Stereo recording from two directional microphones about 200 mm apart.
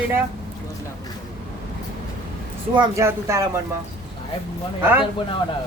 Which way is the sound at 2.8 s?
15° right (ahead or behind).